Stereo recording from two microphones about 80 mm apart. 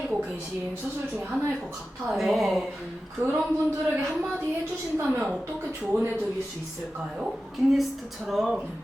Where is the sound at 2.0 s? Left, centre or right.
Centre.